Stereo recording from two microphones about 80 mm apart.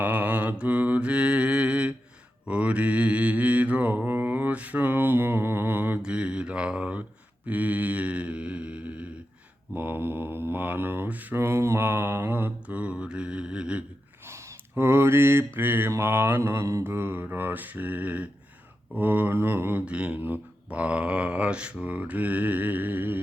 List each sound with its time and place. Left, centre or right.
0.0 s mantra: centre
6.0 s mantra: centre
9.7 s mantra: right
11.3 s mantra: right; by 13.8 s centre
14.3 s a sound: right
15.5 s mantra: right
19.8 s speech: centre